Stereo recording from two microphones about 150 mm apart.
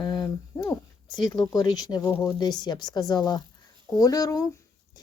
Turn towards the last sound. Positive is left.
turn(degrees=25)  # may be behind; listen again after turning